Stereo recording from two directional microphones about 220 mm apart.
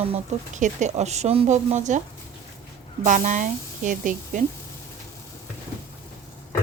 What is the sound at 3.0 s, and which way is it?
Speech, 35° right (ahead or behind).